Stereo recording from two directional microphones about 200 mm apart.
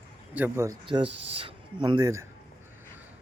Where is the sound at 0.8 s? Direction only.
25° right (ahead or behind).